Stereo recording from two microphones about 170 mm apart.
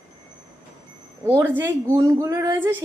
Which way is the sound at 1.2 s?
10° right (ahead or behind).